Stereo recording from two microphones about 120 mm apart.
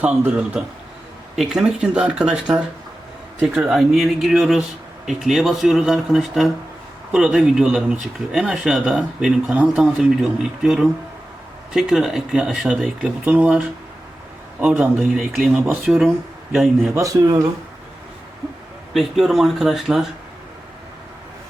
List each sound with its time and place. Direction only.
0.0 s speech: 10° right (ahead or behind)
16.9 s speech: 25° right (ahead or behind)
18.9 s speech: centre (ahead or behind)